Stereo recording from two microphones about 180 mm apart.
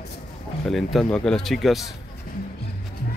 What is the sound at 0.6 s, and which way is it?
Speech, centre (ahead or behind).